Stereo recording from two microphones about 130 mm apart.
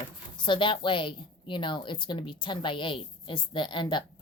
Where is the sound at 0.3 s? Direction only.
40° left (ahead or behind).